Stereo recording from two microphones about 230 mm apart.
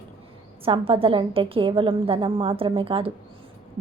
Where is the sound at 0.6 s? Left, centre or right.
Right.